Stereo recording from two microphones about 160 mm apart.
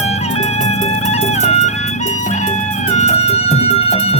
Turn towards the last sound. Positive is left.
turn(degrees=40)  # may be behind; listen again after turning